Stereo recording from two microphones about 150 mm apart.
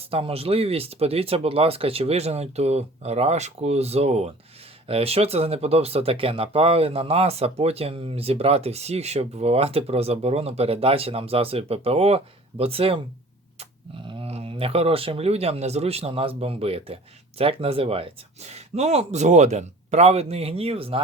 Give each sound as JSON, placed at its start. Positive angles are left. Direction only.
{"t": 0.1, "sound": "speech", "side_deg": -40}
{"t": 14.1, "sound": "speech", "side_deg": -40}